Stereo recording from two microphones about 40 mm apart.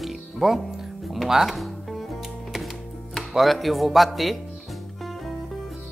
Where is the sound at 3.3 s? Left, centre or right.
Centre.